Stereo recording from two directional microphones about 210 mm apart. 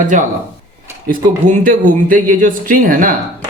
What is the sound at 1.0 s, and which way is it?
Speech, 40° right (ahead or behind).